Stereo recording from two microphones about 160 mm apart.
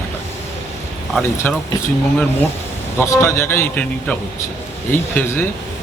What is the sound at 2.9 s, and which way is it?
A man's voice, 15° left (ahead or behind).